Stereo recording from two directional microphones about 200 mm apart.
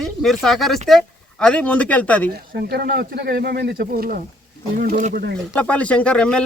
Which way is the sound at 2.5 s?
50° right (ahead or behind).